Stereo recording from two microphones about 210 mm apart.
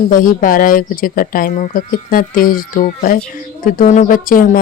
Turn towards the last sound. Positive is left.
turn(degrees=40)  # may be behind; listen again after turning